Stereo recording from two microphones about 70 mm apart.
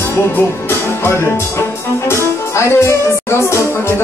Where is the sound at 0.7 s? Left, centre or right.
Left.